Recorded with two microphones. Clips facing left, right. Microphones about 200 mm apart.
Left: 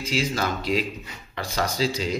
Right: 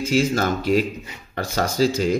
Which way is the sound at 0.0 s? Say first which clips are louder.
Right 6 dB; 45° right (ahead or behind).